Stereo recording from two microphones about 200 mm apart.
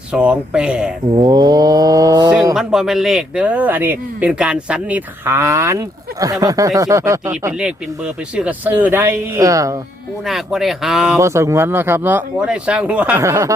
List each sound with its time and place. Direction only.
0.1 s speech: 5° right (ahead or behind)
1.1 s speech: 20° right (ahead or behind)
2.6 s a man's voice: centre (ahead or behind)
10.2 s speech: centre (ahead or behind)
11.2 s a man's voice: 15° right (ahead or behind)